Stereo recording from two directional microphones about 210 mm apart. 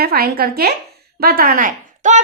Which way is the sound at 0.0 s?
45° right (ahead or behind).